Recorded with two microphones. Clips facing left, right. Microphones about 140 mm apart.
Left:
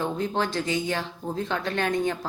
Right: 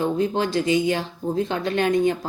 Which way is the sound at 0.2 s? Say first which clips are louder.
Right 5 dB; 15° right (ahead or behind).